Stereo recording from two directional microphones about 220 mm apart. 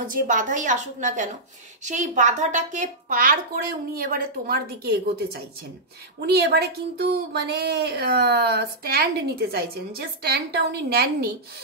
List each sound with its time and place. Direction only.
0.0 s speech: 35° right (ahead or behind)